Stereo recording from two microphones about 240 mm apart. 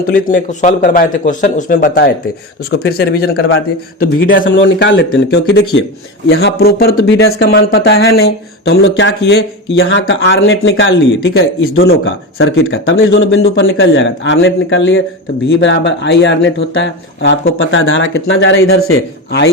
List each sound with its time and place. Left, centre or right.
0.0 s a man's voice: left